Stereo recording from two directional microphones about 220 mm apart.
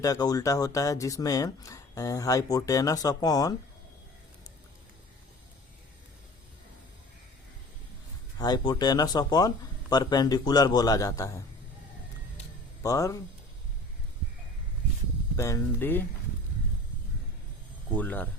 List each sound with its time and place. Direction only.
0.0 s speech: 15° left (ahead or behind)
8.4 s speech: 20° left (ahead or behind)
12.8 s speech: 15° left (ahead or behind)
15.4 s speech: 15° left (ahead or behind)
17.9 s speech: 5° left (ahead or behind)